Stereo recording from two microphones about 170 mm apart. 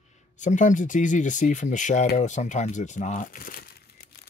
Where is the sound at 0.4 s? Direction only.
45° left (ahead or behind).